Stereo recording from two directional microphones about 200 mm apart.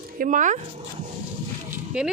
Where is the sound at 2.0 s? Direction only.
5° right (ahead or behind).